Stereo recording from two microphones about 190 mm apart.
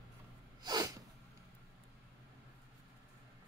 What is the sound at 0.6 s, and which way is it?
Sneeze, 20° right (ahead or behind).